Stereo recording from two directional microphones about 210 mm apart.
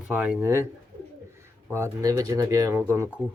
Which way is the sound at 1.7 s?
15° right (ahead or behind).